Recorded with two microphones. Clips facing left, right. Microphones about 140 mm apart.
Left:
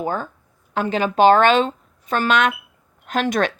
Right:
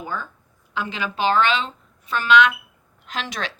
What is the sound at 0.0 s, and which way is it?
A woman's voice, 50° left (ahead or behind).